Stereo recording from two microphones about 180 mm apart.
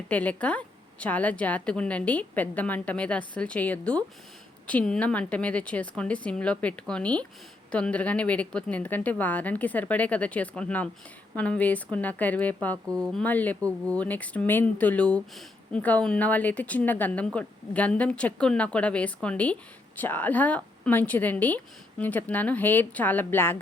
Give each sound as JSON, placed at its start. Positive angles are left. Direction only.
{"t": 0.1, "sound": "speech", "side_deg": 10}
{"t": 12.7, "sound": "speech", "side_deg": -20}
{"t": 13.1, "sound": "speech", "side_deg": 5}
{"t": 13.6, "sound": "speech", "side_deg": -20}
{"t": 13.9, "sound": "speech", "side_deg": 10}